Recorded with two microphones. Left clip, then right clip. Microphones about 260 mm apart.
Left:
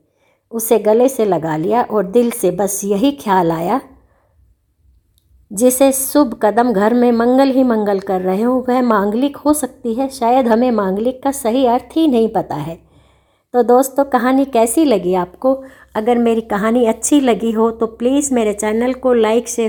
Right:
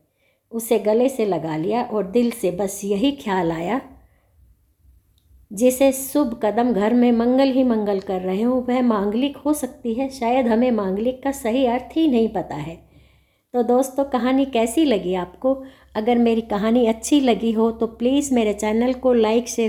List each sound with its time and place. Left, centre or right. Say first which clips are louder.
0.5 s a woman's voice: left 6 dB; left
5.5 s a woman's voice: left 5 dB; left